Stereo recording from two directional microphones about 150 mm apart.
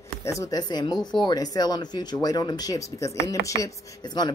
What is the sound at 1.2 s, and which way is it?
Speech, 25° left (ahead or behind).